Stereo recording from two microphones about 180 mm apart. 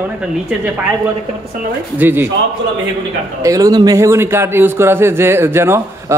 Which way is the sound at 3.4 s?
20° right (ahead or behind).